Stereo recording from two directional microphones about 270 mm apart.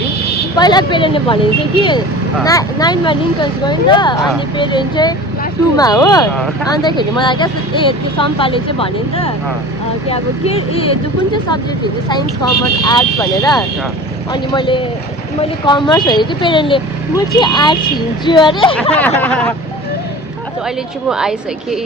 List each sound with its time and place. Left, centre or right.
0.5 s speech: centre
12.8 s speech: centre
18.9 s a woman's voice: centre
21.1 s a woman's voice: centre